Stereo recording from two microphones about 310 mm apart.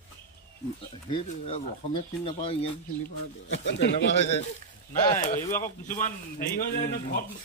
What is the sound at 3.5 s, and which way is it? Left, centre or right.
Speech, left.